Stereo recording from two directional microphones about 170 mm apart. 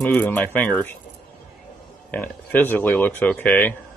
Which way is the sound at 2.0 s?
10° left (ahead or behind).